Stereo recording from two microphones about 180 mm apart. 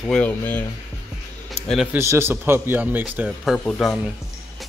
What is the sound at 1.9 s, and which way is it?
A man's voice, 15° right (ahead or behind).